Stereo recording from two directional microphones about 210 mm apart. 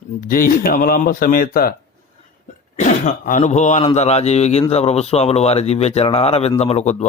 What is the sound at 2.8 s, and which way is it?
Speech, 35° left (ahead or behind).